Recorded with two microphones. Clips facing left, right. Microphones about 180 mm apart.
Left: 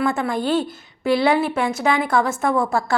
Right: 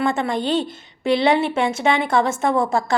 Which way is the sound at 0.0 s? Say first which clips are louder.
Even; 25° right (ahead or behind).